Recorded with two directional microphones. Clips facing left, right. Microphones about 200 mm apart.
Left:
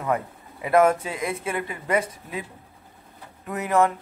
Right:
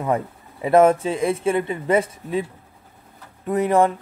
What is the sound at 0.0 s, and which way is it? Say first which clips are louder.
Speech: right 3 dB; 25° right (ahead or behind).